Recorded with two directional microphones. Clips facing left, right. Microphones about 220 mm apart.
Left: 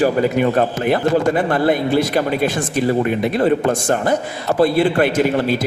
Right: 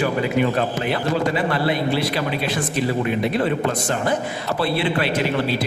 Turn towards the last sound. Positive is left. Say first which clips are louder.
# left 6 dB
turn(degrees=50)  # may be behind; listen again after turning